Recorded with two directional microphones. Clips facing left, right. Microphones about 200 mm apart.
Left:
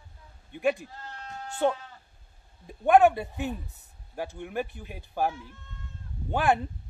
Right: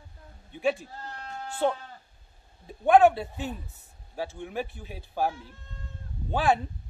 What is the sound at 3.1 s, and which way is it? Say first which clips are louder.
Speech: left 1 dB; 15° left (ahead or behind).